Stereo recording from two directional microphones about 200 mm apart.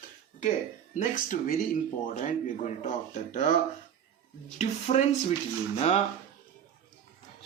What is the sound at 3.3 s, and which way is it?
Speech, 35° left (ahead or behind).